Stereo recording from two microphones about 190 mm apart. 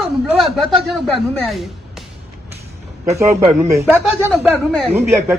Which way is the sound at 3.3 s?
40° right (ahead or behind).